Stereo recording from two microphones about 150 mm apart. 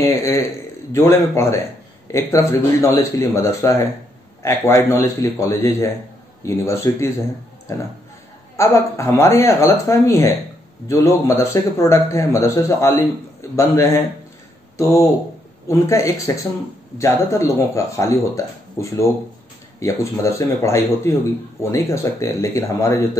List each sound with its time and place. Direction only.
0.0 s a man's voice: 20° left (ahead or behind)
8.5 s a man's voice: 20° left (ahead or behind)